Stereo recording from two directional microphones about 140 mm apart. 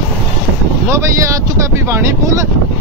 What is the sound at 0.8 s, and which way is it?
Speech, 20° right (ahead or behind).